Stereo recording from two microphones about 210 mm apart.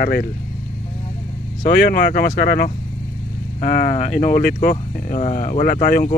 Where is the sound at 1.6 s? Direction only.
45° left (ahead or behind).